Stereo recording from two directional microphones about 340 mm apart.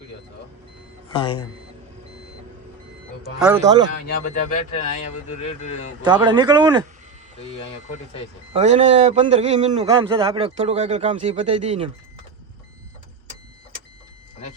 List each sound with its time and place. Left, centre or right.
1.1 s speech: centre
3.4 s speech: centre
6.1 s speech: centre
8.5 s a man's voice: centre